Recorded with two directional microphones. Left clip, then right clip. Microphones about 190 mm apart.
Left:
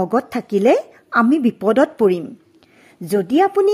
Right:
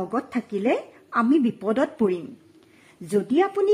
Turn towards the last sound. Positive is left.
turn(degrees=30)  # may be behind; listen again after turning